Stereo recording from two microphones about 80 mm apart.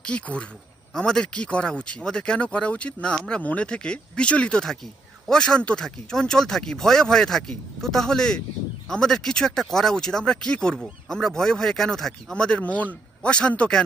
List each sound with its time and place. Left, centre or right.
0.0 s speech: centre